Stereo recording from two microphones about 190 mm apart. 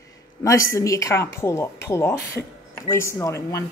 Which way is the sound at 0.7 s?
15° left (ahead or behind).